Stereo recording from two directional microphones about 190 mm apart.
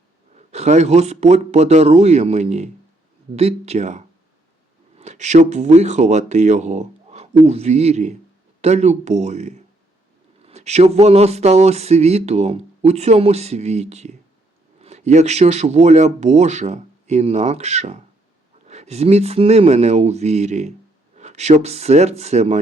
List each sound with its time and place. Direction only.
0.3 s speech: 35° right (ahead or behind)